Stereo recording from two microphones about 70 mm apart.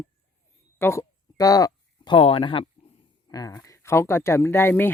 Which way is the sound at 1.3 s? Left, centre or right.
Left.